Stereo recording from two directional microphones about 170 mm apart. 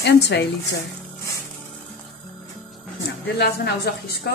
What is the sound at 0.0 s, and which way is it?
Speech, 80° left.